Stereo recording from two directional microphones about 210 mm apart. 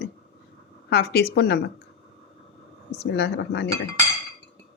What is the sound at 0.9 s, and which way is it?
Speech, 50° left (ahead or behind).